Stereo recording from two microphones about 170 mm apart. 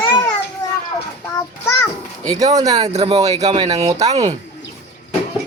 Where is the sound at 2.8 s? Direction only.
35° right (ahead or behind).